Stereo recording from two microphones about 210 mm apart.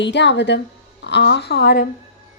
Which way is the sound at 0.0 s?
55° left (ahead or behind).